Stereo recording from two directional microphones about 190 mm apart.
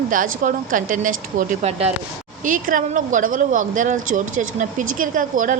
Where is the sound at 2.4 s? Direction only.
45° right (ahead or behind).